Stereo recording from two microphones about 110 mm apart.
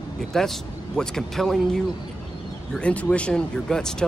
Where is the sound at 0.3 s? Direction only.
5° left (ahead or behind).